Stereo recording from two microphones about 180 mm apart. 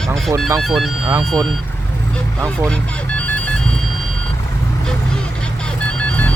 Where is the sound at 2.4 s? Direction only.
5° left (ahead or behind).